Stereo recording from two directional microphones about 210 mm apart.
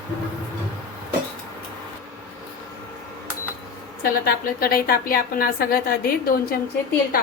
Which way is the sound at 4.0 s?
45° left (ahead or behind).